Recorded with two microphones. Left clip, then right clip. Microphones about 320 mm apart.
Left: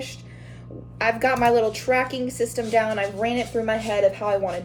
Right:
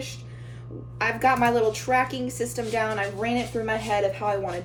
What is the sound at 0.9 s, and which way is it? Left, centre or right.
Speech, centre.